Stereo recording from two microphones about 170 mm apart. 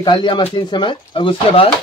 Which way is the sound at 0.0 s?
25° left (ahead or behind).